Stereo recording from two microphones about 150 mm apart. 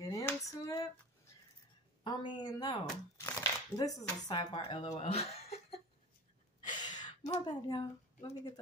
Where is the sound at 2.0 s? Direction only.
30° left (ahead or behind).